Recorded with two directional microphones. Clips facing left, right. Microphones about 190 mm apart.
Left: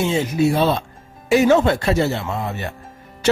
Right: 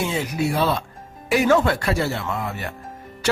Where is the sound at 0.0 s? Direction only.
25° left (ahead or behind).